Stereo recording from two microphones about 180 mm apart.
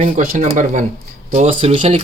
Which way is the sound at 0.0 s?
45° right (ahead or behind).